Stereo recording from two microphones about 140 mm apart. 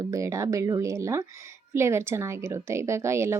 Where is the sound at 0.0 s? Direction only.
20° right (ahead or behind).